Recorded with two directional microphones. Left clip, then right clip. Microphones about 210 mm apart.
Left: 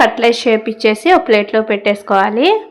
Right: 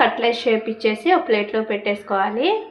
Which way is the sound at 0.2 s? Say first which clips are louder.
Left 7 dB; 40° left (ahead or behind).